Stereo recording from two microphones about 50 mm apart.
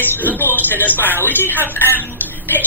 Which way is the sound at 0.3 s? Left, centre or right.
Left.